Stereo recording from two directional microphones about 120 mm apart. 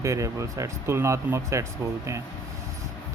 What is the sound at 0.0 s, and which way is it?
Speech, 25° right (ahead or behind).